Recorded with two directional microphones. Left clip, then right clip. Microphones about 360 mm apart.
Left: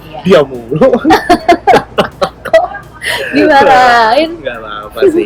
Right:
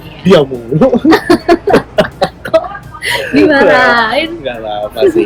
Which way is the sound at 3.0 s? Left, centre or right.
Centre.